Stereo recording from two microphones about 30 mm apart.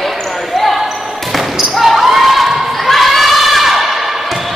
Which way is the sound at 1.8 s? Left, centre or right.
Centre.